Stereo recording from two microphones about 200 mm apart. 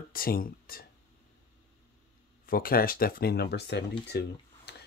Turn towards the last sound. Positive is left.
turn(degrees=55)  # may be behind; listen again after turning